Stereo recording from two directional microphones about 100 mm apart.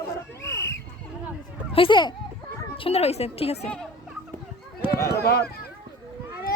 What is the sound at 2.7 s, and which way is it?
Speech, 80° left.